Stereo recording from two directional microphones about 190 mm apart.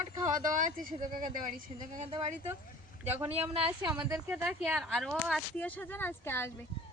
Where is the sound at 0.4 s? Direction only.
45° right (ahead or behind).